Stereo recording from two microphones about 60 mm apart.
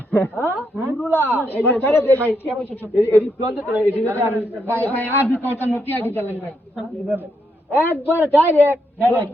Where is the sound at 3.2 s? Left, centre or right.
Right.